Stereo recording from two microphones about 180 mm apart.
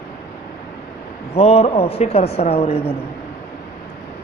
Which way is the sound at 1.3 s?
35° left (ahead or behind).